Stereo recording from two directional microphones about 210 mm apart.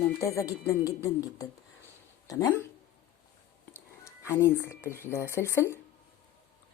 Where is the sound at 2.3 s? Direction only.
15° left (ahead or behind).